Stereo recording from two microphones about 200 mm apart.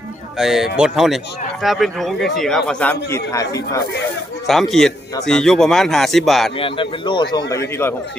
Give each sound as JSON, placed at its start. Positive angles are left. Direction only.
{"t": 0.3, "sound": "a man's voice", "side_deg": 0}
{"t": 4.4, "sound": "a man's voice", "side_deg": 0}
{"t": 6.6, "sound": "a man's voice", "side_deg": 25}